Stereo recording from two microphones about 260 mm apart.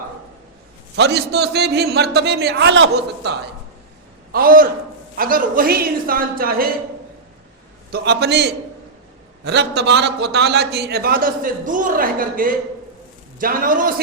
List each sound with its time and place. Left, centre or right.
0.9 s a man's voice: right
4.3 s a man's voice: right
7.9 s a man's voice: right